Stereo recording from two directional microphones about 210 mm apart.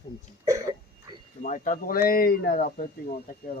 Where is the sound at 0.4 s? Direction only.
15° right (ahead or behind).